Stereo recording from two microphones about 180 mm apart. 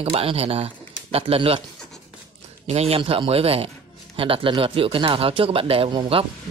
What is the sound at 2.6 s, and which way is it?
Speech, 35° right (ahead or behind).